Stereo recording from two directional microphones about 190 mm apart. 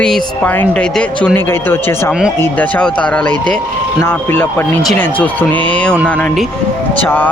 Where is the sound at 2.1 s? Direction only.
5° right (ahead or behind).